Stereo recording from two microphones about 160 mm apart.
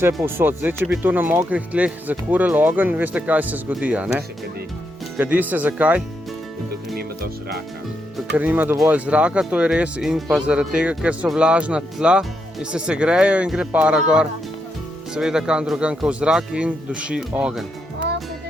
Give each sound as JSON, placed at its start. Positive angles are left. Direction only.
{"t": 0.2, "sound": "speech", "side_deg": -15}
{"t": 5.1, "sound": "speech", "side_deg": -10}
{"t": 6.9, "sound": "music", "side_deg": -75}
{"t": 8.3, "sound": "speech", "side_deg": -10}